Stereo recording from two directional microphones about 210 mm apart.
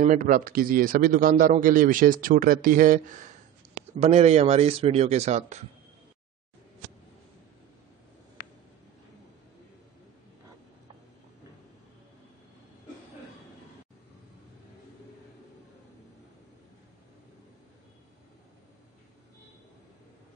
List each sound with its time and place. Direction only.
0.0 s a man's voice: 40° right (ahead or behind)